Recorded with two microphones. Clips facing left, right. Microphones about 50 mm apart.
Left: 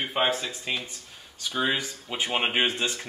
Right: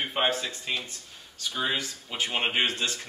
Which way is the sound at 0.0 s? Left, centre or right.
Centre.